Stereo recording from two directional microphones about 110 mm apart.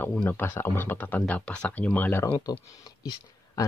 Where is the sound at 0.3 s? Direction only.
20° left (ahead or behind).